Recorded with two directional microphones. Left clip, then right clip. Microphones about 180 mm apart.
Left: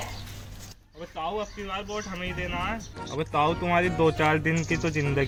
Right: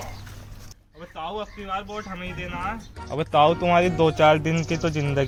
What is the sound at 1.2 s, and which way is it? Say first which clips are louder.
Speech: even; 30° right (ahead or behind).